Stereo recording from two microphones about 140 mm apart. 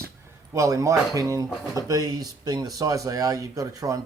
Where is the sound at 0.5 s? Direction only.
20° right (ahead or behind).